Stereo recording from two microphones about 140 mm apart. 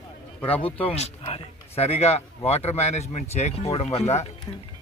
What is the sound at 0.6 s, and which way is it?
A man's voice, 45° left (ahead or behind).